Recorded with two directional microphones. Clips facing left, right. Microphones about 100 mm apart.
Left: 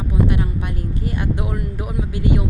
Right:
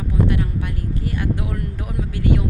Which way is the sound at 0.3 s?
20° left (ahead or behind).